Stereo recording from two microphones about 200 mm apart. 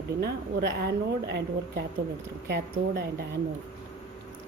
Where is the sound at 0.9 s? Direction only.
55° right (ahead or behind).